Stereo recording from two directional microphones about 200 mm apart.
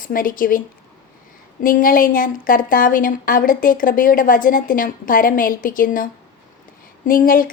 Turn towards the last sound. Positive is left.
turn(degrees=45)  # may be behind; listen again after turning